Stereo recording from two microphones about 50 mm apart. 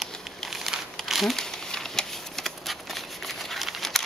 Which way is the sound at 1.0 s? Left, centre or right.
Centre.